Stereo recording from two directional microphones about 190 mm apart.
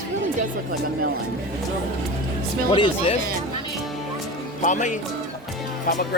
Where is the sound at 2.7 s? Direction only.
25° left (ahead or behind).